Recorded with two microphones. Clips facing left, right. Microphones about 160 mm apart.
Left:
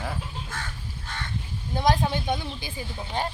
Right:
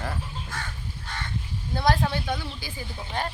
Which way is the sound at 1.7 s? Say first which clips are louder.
Left 1 dB; 15° left (ahead or behind).